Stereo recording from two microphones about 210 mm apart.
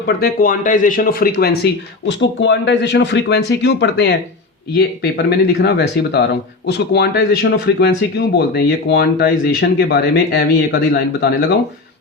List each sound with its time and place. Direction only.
0.2 s speech: 45° left (ahead or behind)